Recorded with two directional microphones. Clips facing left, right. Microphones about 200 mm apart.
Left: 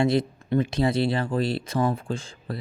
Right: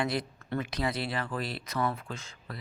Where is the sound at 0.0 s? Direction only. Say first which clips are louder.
Left 9 dB; 25° left (ahead or behind).